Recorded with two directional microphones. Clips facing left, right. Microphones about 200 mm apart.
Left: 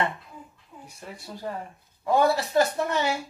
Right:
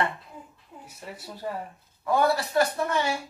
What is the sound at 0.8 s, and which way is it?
Giggle, 5° right (ahead or behind).